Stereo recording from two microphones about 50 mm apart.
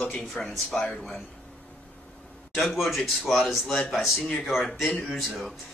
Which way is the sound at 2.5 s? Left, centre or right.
Centre.